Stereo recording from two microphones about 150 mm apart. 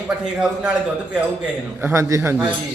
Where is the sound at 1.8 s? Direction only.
15° right (ahead or behind).